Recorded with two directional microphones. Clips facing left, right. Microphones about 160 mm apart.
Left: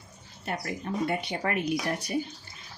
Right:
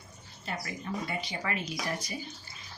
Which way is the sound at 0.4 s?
60° left (ahead or behind).